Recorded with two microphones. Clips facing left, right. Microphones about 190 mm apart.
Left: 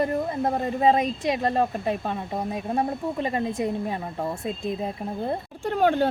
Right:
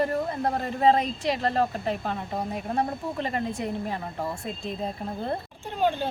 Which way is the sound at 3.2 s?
20° left (ahead or behind).